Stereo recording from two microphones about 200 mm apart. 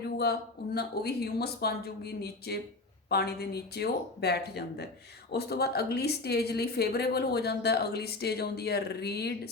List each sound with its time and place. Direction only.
0.2 s a woman's voice: 50° left (ahead or behind)